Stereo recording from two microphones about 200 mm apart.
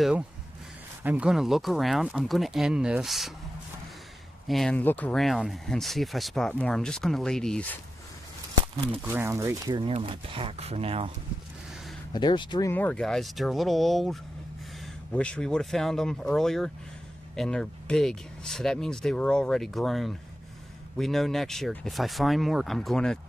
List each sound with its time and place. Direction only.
1.0 s speech: 5° right (ahead or behind)
4.5 s speech: centre (ahead or behind)
9.0 s speech: 10° right (ahead or behind); by 11.1 s 30° right (ahead or behind)
12.1 s speech: 20° left (ahead or behind); by 23.1 s centre (ahead or behind)